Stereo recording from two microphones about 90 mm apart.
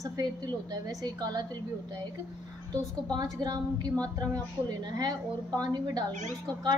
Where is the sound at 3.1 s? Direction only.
50° right (ahead or behind).